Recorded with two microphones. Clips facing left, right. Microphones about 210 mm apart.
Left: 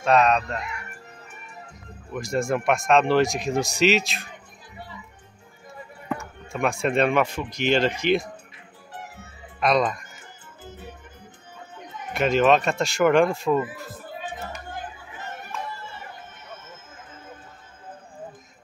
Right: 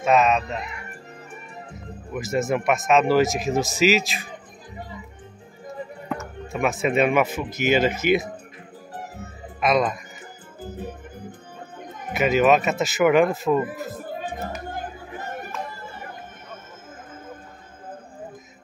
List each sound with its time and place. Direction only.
0.0 s speech: 5° right (ahead or behind)
2.1 s speech: 5° right (ahead or behind)
4.3 s music: 45° right (ahead or behind)
6.0 s speech: centre (ahead or behind)
8.9 s music: 40° right (ahead or behind)
9.6 s music: centre (ahead or behind)
11.8 s a sound: 50° right (ahead or behind)
12.1 s speech: 5° right (ahead or behind)
13.8 s music: 45° right (ahead or behind)
14.7 s chatter: 45° right (ahead or behind)